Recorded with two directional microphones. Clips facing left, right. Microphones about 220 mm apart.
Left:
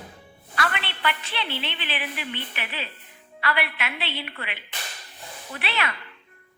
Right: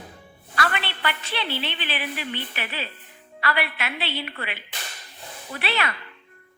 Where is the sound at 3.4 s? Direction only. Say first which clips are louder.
Right 1 dB; 40° right (ahead or behind).